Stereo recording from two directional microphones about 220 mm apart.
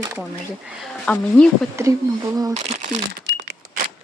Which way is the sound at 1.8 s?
15° right (ahead or behind).